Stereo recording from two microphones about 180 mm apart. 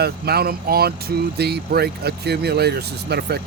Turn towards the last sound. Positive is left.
turn(degrees=-65)  # may be behind; listen again after turning